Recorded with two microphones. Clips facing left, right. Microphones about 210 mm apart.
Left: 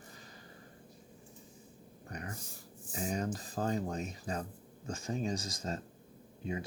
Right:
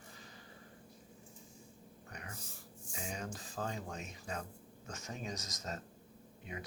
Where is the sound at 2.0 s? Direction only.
40° left (ahead or behind).